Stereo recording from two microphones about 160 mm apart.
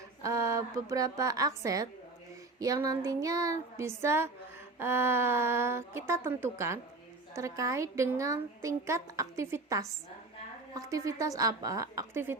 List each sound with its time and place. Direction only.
0.2 s a child's voice: 20° right (ahead or behind)